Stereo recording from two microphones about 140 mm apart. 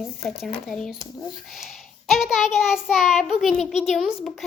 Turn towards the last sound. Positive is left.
turn(degrees=-5)  # may be behind; listen again after turning